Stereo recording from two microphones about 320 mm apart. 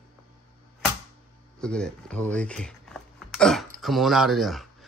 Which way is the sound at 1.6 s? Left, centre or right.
Centre.